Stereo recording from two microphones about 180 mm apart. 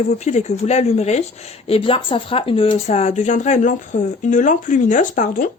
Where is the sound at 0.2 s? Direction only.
40° left (ahead or behind).